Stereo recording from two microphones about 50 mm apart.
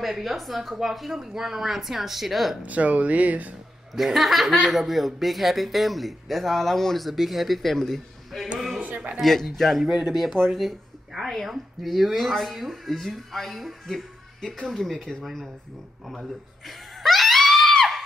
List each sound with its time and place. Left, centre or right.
0.0 s speech: centre
2.6 s speech: right
3.9 s speech: centre
8.5 s a sound: centre
8.8 s a sound: right
9.2 s speech: centre
14.4 s speech: centre
15.2 s speech: centre
16.6 s screaming: centre